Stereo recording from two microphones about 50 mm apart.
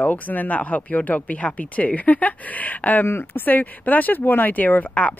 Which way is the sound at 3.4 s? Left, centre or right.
Left.